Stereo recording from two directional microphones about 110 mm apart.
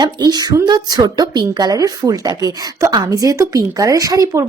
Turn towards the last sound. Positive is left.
turn(degrees=-30)  # may be behind; listen again after turning